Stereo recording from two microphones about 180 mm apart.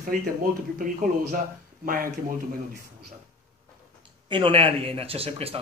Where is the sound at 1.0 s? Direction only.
45° right (ahead or behind).